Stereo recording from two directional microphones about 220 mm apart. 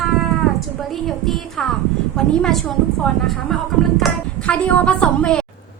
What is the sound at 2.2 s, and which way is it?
A woman's voice, centre (ahead or behind).